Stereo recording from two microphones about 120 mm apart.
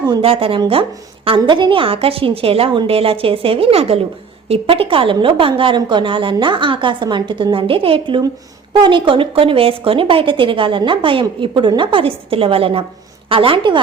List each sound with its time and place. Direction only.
0.2 s speech: 50° right (ahead or behind)